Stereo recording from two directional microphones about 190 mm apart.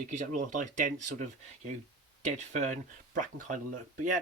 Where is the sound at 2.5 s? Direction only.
40° right (ahead or behind).